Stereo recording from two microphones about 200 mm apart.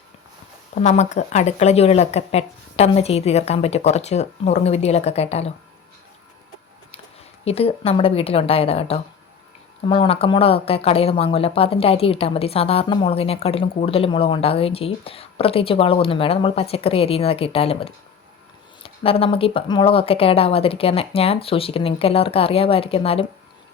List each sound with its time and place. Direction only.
0.8 s speech: 35° left (ahead or behind)
7.4 s speech: 30° left (ahead or behind)